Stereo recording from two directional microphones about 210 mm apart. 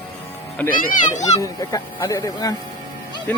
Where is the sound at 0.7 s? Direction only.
35° left (ahead or behind).